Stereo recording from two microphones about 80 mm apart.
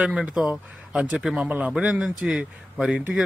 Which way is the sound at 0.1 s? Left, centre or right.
Centre.